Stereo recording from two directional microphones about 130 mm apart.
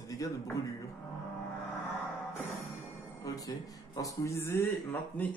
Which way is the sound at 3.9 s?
25° left (ahead or behind).